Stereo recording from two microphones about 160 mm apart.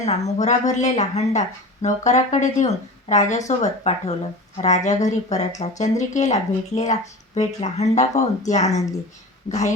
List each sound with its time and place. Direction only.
0.0 s a woman's voice: 45° left (ahead or behind)